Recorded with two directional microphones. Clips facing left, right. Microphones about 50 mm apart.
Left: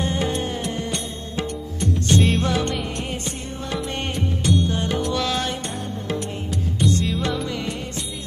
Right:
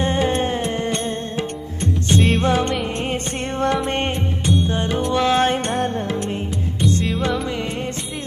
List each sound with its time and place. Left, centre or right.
0.0 s music: right
2.4 s music: right
3.3 s music: right
3.8 s music: right
6.1 s music: right
7.4 s music: right